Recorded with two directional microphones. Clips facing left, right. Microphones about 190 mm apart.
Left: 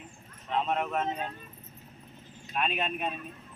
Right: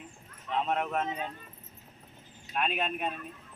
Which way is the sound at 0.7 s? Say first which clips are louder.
Right 1 dB; 5° right (ahead or behind).